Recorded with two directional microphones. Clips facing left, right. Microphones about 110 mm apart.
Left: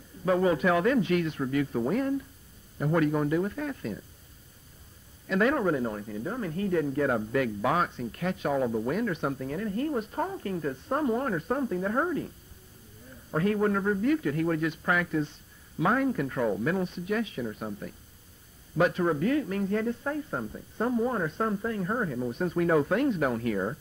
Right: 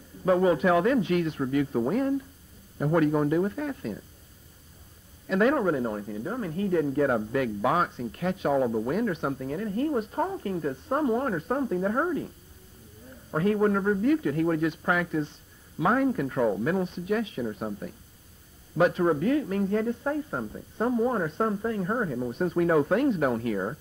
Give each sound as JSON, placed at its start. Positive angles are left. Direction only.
{"t": 0.2, "sound": "speech", "side_deg": -20}
{"t": 5.3, "sound": "speech", "side_deg": -20}
{"t": 13.3, "sound": "speech", "side_deg": -20}